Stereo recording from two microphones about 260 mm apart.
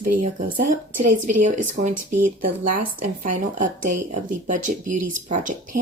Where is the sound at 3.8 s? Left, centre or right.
Right.